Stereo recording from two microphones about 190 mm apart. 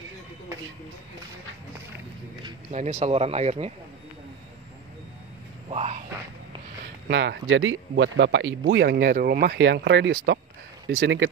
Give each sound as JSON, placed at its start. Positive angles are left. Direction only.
{"t": 2.7, "sound": "speech", "side_deg": -35}
{"t": 5.7, "sound": "a sound", "side_deg": -35}
{"t": 7.1, "sound": "speech", "side_deg": -70}
{"t": 9.6, "sound": "speech", "side_deg": -65}
{"t": 10.9, "sound": "speech", "side_deg": -80}